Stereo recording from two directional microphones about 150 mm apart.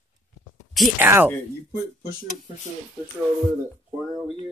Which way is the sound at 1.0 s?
15° right (ahead or behind).